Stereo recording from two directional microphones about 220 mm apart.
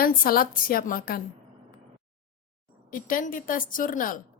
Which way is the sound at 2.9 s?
40° left (ahead or behind).